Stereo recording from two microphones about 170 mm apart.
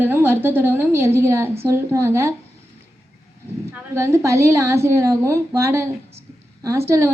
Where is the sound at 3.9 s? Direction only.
15° right (ahead or behind).